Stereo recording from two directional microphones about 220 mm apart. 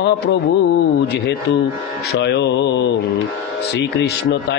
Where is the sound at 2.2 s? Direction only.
50° left (ahead or behind).